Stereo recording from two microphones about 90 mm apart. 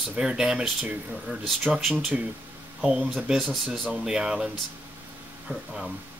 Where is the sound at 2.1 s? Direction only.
15° right (ahead or behind).